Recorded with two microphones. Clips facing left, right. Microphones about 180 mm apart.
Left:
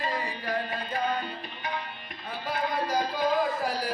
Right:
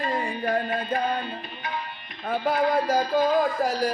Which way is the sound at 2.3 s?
55° right (ahead or behind).